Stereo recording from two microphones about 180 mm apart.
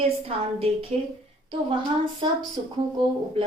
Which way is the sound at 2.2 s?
25° right (ahead or behind).